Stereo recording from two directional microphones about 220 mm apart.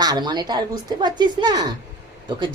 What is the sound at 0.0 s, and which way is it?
Speech, 20° right (ahead or behind).